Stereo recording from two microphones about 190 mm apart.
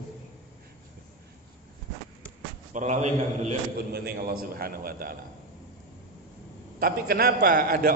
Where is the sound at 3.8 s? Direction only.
55° right (ahead or behind).